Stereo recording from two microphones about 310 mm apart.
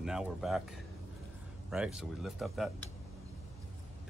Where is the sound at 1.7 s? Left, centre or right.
Centre.